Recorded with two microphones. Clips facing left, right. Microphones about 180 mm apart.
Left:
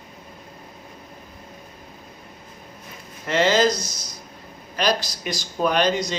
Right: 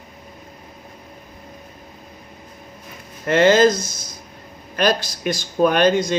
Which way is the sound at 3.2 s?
55° right (ahead or behind).